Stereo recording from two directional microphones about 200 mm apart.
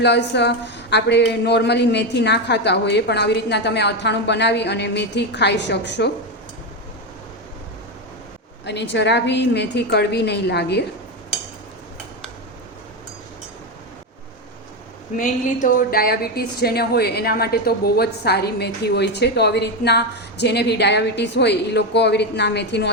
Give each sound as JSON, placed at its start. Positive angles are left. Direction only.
{"t": 0.0, "sound": "a woman's voice", "side_deg": 60}
{"t": 8.6, "sound": "a woman's voice", "side_deg": 60}
{"t": 15.1, "sound": "a woman's voice", "side_deg": 40}